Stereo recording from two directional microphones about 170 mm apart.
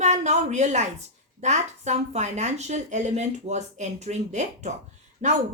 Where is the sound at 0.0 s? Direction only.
45° right (ahead or behind).